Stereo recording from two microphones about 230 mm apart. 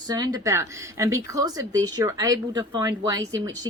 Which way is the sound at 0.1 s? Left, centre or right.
Centre.